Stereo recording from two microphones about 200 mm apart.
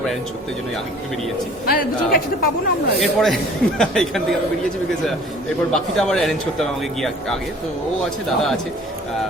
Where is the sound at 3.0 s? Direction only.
Centre (ahead or behind).